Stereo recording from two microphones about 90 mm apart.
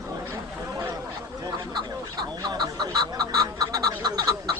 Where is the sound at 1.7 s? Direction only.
50° right (ahead or behind).